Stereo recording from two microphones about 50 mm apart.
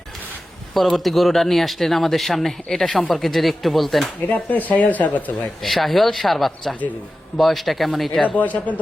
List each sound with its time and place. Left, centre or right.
0.7 s speech: centre
4.3 s speech: left
5.6 s speech: centre
8.2 s speech: left